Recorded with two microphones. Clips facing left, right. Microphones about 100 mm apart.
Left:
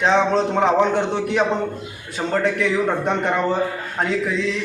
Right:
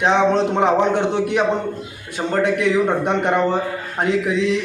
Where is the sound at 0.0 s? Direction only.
15° right (ahead or behind).